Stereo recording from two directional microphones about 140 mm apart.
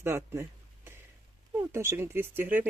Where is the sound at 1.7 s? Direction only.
15° right (ahead or behind).